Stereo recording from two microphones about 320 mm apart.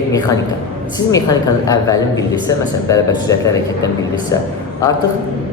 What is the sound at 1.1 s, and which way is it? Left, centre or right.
Speech, centre.